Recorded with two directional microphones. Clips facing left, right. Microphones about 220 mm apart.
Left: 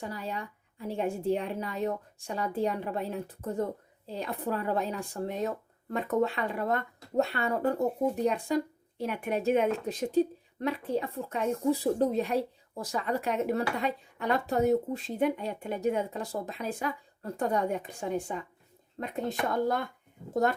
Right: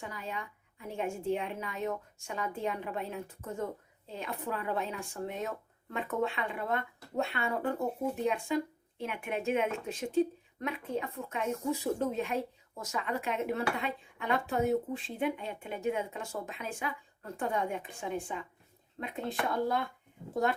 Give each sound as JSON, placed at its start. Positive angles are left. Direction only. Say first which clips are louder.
{"t": 0.0, "sound": "a woman's voice", "louder": "left 4 dB", "side_deg": 35}